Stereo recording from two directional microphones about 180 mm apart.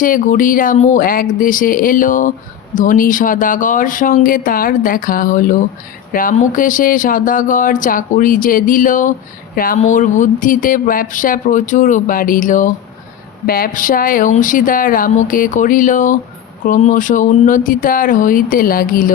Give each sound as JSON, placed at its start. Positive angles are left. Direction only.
{"t": 0.0, "sound": "speech", "side_deg": 50}